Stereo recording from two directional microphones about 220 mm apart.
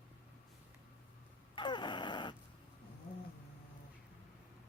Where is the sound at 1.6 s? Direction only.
20° left (ahead or behind).